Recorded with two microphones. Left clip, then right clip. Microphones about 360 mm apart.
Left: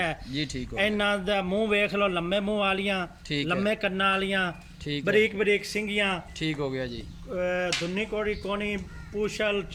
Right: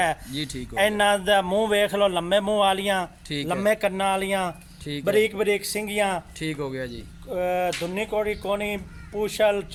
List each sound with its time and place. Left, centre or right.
0.0 s speech: centre
0.3 s speech: centre
0.8 s a man's voice: centre
3.2 s speech: centre
3.5 s a man's voice: centre
6.4 s speech: centre
7.3 s a man's voice: centre